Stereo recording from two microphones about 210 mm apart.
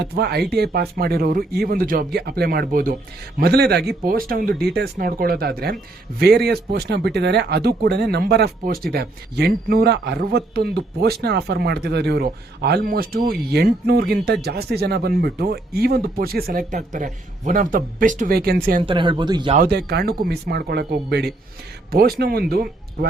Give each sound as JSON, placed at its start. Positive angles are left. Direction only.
{"t": 0.0, "sound": "speech", "side_deg": -50}
{"t": 18.8, "sound": "speech", "side_deg": -25}
{"t": 19.5, "sound": "speech", "side_deg": -50}